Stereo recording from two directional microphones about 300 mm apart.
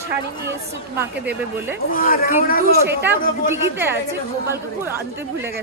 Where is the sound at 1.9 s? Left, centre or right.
Left.